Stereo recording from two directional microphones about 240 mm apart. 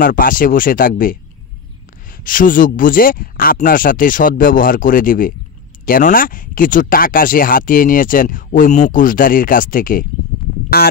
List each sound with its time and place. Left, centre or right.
0.0 s speech: left
2.1 s speech: left